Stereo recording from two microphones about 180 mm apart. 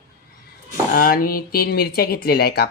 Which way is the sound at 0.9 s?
55° left (ahead or behind).